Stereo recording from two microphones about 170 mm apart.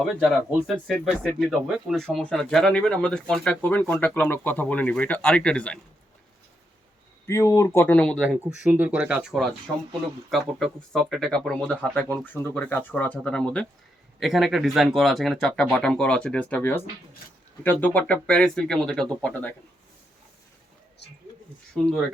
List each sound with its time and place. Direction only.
0.0 s speech: centre (ahead or behind)
7.3 s speech: 20° left (ahead or behind)
8.2 s speech: 10° right (ahead or behind)
10.6 s speech: 5° left (ahead or behind)